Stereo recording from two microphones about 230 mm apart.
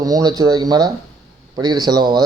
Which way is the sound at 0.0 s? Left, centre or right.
Centre.